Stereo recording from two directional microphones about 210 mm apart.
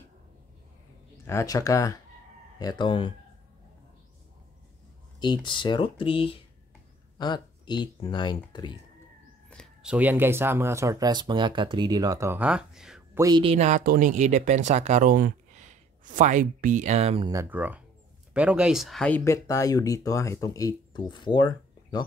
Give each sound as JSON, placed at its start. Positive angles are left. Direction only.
{"t": 1.1, "sound": "speech", "side_deg": 10}
{"t": 5.2, "sound": "speech", "side_deg": 20}
{"t": 9.5, "sound": "speech", "side_deg": 0}
{"t": 13.2, "sound": "speech", "side_deg": -20}
{"t": 17.3, "sound": "speech", "side_deg": -10}